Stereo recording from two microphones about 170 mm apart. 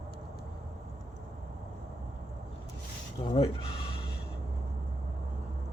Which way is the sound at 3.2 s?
35° left (ahead or behind).